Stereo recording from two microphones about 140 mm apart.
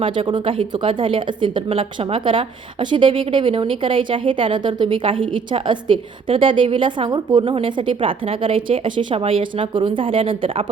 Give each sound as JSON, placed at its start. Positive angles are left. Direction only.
{"t": 0.0, "sound": "speech", "side_deg": -35}